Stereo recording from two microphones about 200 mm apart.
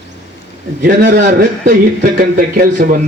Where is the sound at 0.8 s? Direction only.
45° right (ahead or behind).